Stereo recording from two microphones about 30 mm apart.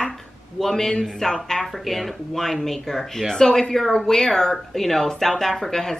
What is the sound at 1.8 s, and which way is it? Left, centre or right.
Speech, centre.